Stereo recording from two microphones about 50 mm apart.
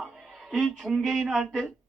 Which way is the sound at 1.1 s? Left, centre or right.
Centre.